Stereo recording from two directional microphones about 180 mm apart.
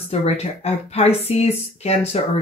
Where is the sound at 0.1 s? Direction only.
35° left (ahead or behind).